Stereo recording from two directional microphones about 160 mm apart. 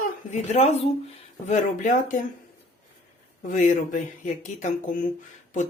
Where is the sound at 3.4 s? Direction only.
55° left (ahead or behind).